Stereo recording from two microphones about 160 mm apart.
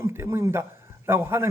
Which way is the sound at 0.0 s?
15° right (ahead or behind).